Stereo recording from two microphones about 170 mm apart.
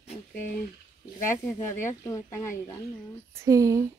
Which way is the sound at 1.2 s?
15° left (ahead or behind).